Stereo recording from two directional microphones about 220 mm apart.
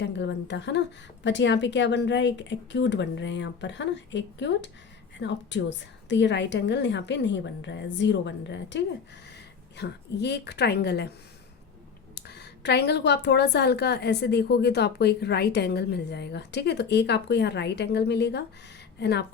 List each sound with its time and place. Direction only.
0.0 s a woman's voice: 50° left (ahead or behind)
12.1 s a woman's voice: 50° left (ahead or behind)